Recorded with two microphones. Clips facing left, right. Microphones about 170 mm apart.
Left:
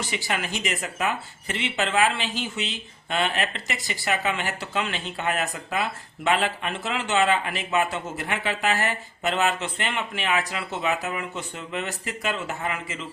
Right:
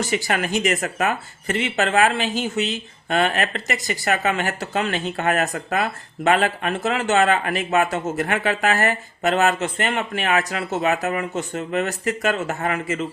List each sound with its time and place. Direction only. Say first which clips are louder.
0.0 s speech: right 6 dB; 45° right (ahead or behind)